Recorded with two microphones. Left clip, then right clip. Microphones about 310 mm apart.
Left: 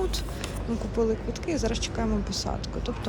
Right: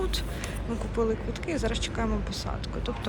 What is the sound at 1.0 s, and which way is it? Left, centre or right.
Speech, centre.